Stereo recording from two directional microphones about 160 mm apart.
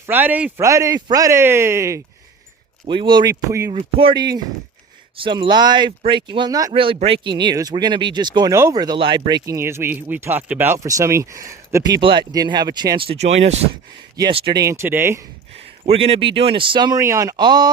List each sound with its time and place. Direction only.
0.0 s a man's voice: 10° right (ahead or behind)
2.8 s speech: 30° right (ahead or behind)
3.5 s a man's voice: 15° right (ahead or behind)
3.8 s speech: 35° right (ahead or behind)
14.2 s speech: 30° right (ahead or behind)
14.6 s a man's voice: 15° right (ahead or behind)
15.9 s speech: 35° right (ahead or behind)